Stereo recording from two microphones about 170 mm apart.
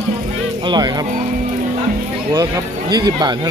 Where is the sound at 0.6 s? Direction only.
25° right (ahead or behind).